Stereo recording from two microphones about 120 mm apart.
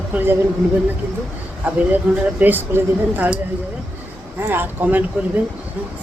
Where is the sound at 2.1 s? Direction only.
15° right (ahead or behind).